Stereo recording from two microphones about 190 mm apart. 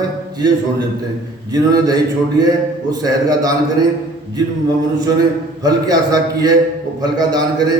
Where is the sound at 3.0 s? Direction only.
20° right (ahead or behind).